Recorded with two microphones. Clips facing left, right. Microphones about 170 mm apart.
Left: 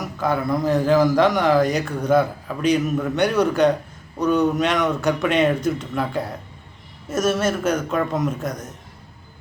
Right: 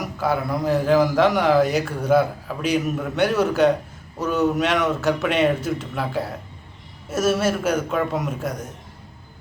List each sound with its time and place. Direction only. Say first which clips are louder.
0.0 s a man's voice: left 1 dB; 5° right (ahead or behind)